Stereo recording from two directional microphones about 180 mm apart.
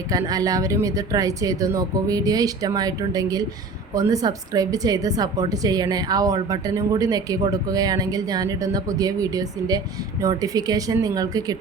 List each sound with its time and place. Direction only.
0.1 s a woman's voice: 20° right (ahead or behind)